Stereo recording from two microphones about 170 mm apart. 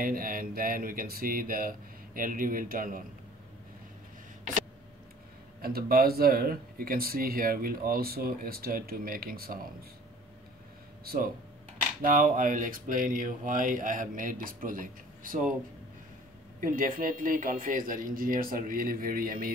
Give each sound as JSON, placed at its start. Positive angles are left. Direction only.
{"t": 0.0, "sound": "speech", "side_deg": -55}
{"t": 5.6, "sound": "speech", "side_deg": -60}
{"t": 11.1, "sound": "speech", "side_deg": -60}
{"t": 16.5, "sound": "speech", "side_deg": -55}